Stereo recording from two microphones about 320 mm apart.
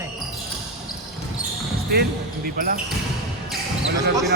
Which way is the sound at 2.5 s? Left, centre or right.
Right.